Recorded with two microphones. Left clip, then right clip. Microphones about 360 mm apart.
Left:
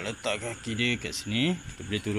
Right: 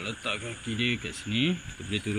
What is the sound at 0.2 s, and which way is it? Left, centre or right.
Speech, centre.